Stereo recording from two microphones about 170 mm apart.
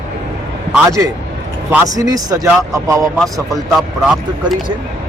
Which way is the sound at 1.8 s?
20° right (ahead or behind).